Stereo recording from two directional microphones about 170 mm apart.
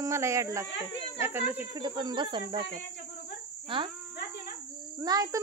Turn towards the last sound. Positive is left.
turn(degrees=-20)  # may be behind; listen again after turning